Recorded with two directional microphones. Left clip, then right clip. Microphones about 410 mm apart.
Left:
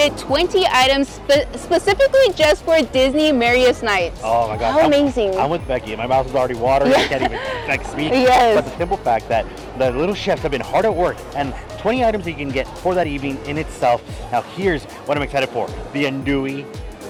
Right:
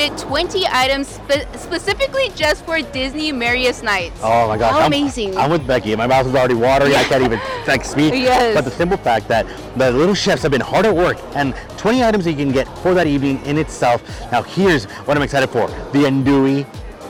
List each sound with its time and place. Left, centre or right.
0.0 s a woman's voice: centre
4.2 s speech: right
4.7 s speech: centre
5.4 s speech: right
7.0 s speech: centre
8.5 s speech: right